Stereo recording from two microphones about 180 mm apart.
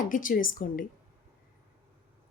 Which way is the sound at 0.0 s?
50° left (ahead or behind).